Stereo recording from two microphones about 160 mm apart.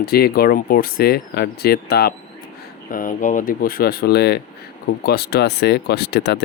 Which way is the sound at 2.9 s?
60° left (ahead or behind).